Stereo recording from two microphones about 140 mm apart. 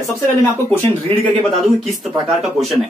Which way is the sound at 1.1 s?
40° right (ahead or behind).